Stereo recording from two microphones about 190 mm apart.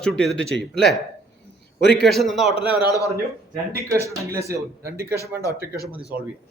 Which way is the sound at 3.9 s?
15° right (ahead or behind).